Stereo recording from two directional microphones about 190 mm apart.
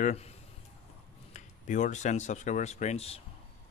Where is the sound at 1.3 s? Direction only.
40° left (ahead or behind).